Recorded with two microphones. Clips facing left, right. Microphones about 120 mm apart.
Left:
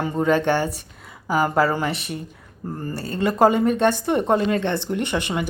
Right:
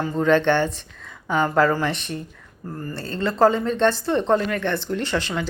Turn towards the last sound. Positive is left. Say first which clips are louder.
# left 1 dB
turn(degrees=15)  # may be behind; listen again after turning